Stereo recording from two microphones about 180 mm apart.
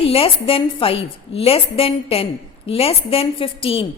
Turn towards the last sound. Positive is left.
turn(degrees=30)  # may be behind; listen again after turning